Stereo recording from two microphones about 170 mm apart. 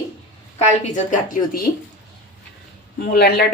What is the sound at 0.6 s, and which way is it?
A woman's voice, 45° left (ahead or behind).